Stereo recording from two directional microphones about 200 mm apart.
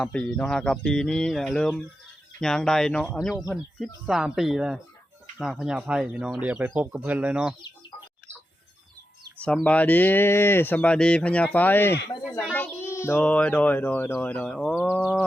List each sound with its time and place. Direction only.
0.0 s speech: 5° left (ahead or behind)
9.4 s a child's voice: 5° left (ahead or behind)